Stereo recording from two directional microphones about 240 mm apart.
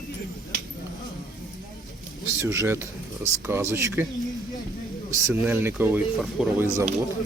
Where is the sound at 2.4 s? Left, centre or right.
Centre.